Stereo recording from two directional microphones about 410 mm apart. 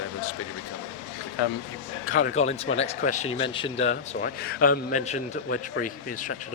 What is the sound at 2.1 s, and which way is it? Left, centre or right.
Speech, centre.